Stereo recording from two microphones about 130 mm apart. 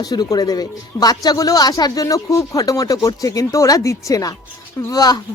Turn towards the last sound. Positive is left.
turn(degrees=30)  # may be behind; listen again after turning